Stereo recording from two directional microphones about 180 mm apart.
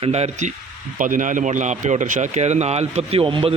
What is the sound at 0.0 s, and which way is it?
A man's voice, 35° right (ahead or behind).